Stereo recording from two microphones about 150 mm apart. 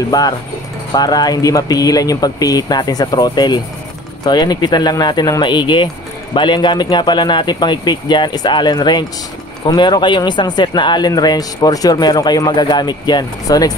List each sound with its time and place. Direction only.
0.1 s speech: 25° left (ahead or behind)